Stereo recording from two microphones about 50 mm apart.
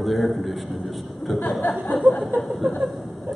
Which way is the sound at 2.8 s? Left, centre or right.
Centre.